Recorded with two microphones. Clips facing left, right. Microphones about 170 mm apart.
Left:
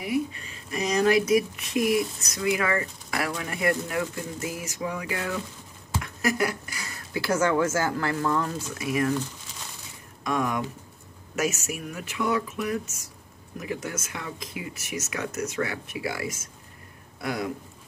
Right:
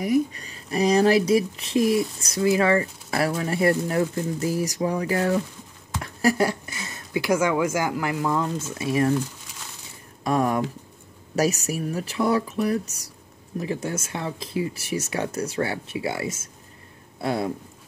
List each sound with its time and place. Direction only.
0.0 s speech: 40° right (ahead or behind); by 8.6 s 15° right (ahead or behind)
8.7 s speech: 30° right (ahead or behind)
10.2 s speech: 35° right (ahead or behind)